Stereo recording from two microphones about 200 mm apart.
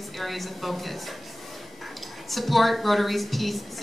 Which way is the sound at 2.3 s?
Centre (ahead or behind).